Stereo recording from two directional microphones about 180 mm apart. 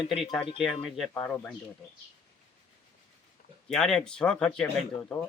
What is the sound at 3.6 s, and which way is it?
Speech, centre (ahead or behind).